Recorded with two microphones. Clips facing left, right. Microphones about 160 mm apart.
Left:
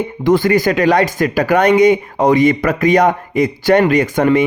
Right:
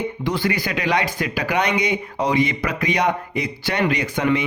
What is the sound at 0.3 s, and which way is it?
Speech, 45° left (ahead or behind).